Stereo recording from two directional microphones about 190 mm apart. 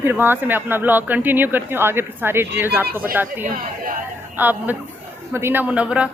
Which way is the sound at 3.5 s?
45° right (ahead or behind).